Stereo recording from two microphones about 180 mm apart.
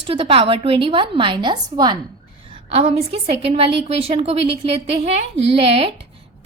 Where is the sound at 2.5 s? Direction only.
35° right (ahead or behind).